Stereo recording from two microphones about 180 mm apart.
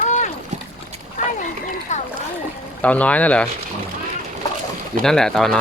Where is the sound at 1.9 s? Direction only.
40° left (ahead or behind).